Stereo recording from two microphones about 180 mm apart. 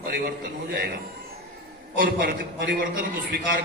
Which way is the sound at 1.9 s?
50° right (ahead or behind).